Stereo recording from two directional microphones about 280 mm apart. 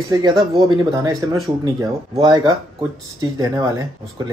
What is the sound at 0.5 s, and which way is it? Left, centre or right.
Speech, centre.